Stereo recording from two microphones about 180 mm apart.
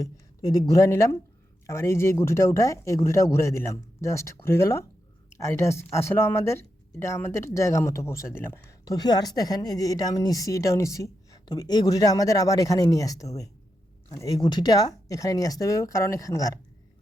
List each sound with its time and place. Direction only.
0.0 s a woman's voice: 20° left (ahead or behind)